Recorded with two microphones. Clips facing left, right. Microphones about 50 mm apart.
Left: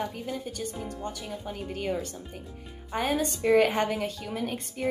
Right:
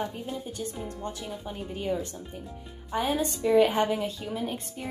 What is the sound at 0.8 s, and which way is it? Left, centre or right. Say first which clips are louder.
Speech: even; centre.